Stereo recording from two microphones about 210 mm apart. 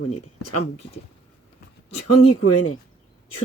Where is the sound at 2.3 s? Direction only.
90° left.